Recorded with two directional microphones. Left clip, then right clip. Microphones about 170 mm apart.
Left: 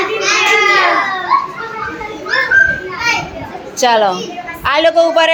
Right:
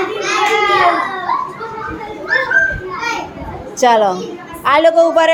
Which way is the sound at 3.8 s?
10° right (ahead or behind).